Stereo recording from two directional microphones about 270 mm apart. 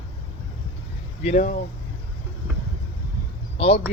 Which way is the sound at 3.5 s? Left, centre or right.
Left.